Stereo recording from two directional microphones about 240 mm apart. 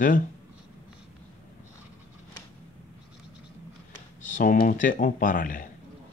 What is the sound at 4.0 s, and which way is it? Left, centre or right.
Speech, left.